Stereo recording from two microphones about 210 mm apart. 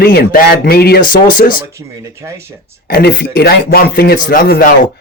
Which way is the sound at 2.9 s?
45° left (ahead or behind).